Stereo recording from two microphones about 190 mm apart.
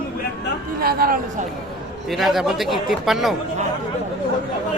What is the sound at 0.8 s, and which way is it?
Speech, 50° right (ahead or behind).